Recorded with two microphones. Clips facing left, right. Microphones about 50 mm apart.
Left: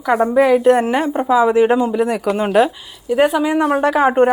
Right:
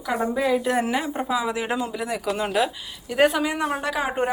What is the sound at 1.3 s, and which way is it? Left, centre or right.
Speech, left.